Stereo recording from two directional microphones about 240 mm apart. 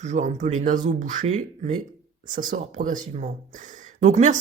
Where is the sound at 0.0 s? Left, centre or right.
Right.